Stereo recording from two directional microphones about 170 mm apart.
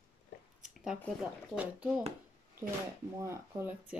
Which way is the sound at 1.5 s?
10° right (ahead or behind).